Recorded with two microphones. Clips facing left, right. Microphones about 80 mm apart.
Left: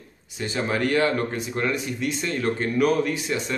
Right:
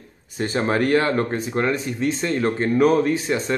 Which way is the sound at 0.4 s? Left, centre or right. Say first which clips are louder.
Right 4 dB; right.